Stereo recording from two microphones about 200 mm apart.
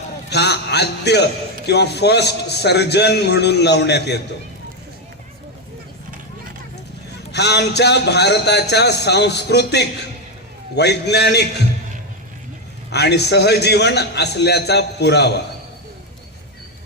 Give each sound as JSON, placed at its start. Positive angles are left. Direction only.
{"t": 0.3, "sound": "a sound", "side_deg": 55}
{"t": 1.6, "sound": "a man's voice", "side_deg": 55}
{"t": 7.3, "sound": "a man's voice", "side_deg": 55}
{"t": 12.9, "sound": "a man's voice", "side_deg": 55}